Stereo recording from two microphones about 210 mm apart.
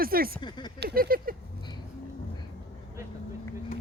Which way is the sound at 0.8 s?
50° right (ahead or behind).